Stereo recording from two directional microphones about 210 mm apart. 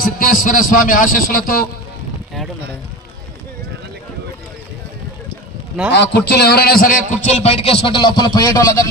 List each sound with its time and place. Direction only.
0.0 s a man's voice: 40° left (ahead or behind)
5.9 s a man's voice: 55° left (ahead or behind)
7.2 s speech: 30° left (ahead or behind)